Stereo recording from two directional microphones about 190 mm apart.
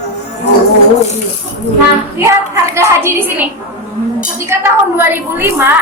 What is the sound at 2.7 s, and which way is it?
Speech, 15° right (ahead or behind).